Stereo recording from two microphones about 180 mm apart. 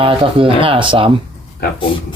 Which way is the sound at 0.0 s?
30° right (ahead or behind).